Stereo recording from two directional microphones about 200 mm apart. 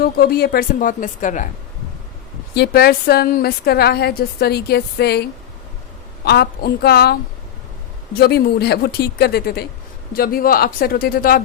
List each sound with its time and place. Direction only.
0.0 s a woman's voice: 50° left (ahead or behind)
2.6 s a woman's voice: 50° left (ahead or behind)
8.2 s a woman's voice: 55° left (ahead or behind)